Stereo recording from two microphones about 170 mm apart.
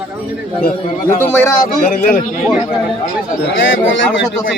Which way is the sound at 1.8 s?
55° left (ahead or behind).